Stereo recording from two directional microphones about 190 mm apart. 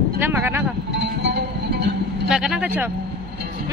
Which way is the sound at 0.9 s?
60° right (ahead or behind).